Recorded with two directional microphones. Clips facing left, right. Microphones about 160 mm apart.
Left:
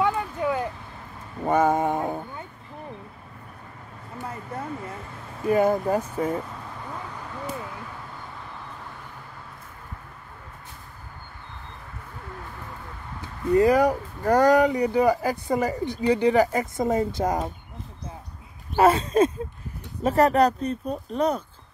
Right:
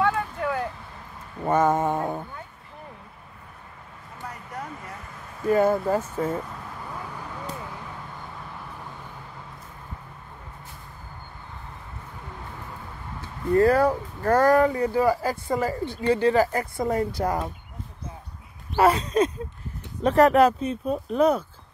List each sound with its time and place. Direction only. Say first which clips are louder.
0.0 s a sound: even; 20° left (ahead or behind)
4.3 s a sound: left 3 dB; 25° left (ahead or behind)
5.5 s speech: even; 15° left (ahead or behind)
13.5 s speech: even; 15° left (ahead or behind)
18.8 s speech: left 2 dB; 25° left (ahead or behind)
20.0 s speech: right 2 dB; centre (ahead or behind)